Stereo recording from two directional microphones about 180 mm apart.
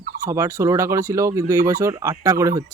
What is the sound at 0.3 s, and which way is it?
Speech, 15° right (ahead or behind).